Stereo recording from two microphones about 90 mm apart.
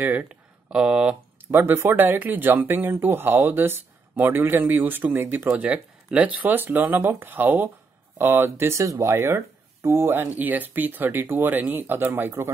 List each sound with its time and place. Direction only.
0.0 s speech: 15° right (ahead or behind)
1.5 s speech: 25° right (ahead or behind)
5.7 s speech: 10° right (ahead or behind); by 12.4 s 30° right (ahead or behind)